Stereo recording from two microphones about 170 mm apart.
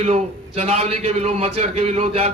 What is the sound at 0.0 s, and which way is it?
A man's voice, 40° right (ahead or behind).